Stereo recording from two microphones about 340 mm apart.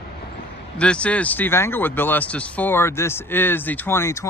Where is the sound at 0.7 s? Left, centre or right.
Centre.